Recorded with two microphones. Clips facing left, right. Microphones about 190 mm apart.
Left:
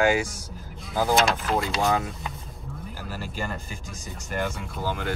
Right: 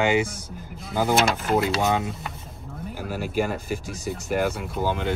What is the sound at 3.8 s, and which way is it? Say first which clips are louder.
Speech: right 8 dB; 65° right (ahead or behind).